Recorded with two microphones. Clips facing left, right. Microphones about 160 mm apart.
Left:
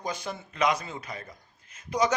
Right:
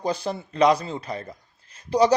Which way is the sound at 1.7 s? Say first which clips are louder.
Right 7 dB; 35° right (ahead or behind).